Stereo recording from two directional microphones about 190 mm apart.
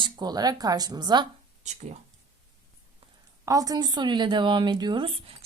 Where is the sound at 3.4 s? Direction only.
20° right (ahead or behind).